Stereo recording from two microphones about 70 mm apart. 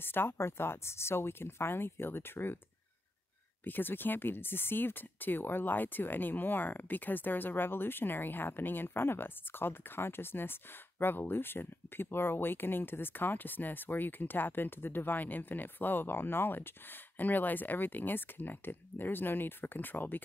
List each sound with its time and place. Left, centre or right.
0.0 s speech: left
3.6 s speech: left